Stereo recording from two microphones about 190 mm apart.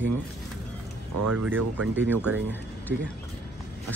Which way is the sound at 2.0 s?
10° left (ahead or behind).